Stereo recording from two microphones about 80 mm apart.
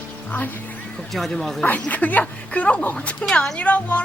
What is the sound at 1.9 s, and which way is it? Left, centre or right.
A woman's voice, centre.